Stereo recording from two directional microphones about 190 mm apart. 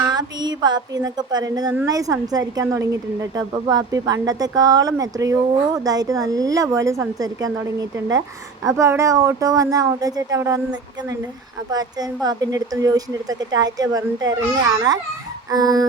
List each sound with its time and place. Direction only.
0.0 s a woman's voice: 20° right (ahead or behind)
15.4 s a woman's voice: 20° right (ahead or behind)